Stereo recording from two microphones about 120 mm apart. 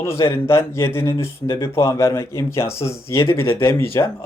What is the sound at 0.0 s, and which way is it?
Speech, 20° left (ahead or behind).